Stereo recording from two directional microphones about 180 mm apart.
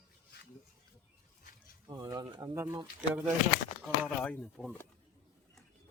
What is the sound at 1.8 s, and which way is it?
Speech, 20° right (ahead or behind).